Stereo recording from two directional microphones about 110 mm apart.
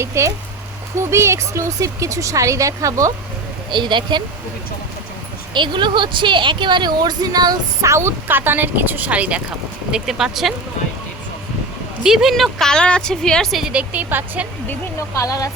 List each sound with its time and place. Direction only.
0.0 s speech: 25° right (ahead or behind)
3.7 s speech: 45° right (ahead or behind)
5.5 s a woman's voice: 45° right (ahead or behind); by 10.5 s 5° right (ahead or behind)
12.0 s speech: 5° right (ahead or behind)
13.7 s a woman's voice: 15° right (ahead or behind)
14.9 s speech: 30° left (ahead or behind)